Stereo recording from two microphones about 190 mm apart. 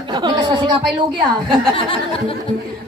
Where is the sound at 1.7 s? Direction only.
30° left (ahead or behind).